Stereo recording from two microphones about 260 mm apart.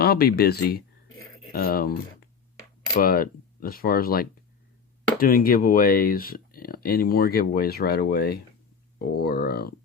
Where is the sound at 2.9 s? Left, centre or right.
Left.